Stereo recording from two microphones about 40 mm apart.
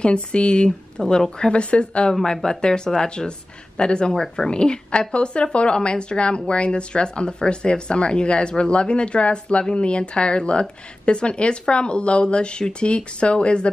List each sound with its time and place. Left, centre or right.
0.0 s a woman's voice: left
1.5 s a woman's voice: left
2.2 s a woman's voice: centre
4.1 s speech: centre
4.5 s a woman's voice: left